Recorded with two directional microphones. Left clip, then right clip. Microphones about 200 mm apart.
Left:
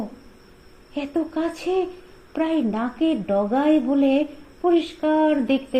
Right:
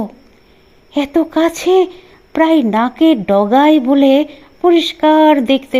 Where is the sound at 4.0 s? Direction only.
90° right.